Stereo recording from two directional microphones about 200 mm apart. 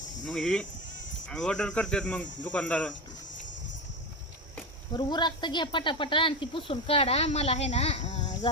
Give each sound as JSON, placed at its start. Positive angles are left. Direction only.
{"t": 0.3, "sound": "speech", "side_deg": 5}
{"t": 4.9, "sound": "speech", "side_deg": 20}